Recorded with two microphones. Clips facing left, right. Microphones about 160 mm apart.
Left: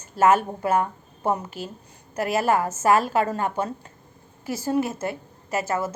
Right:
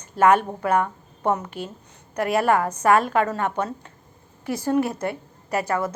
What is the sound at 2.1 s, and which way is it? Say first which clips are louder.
A woman's voice: right 2 dB; 25° left (ahead or behind).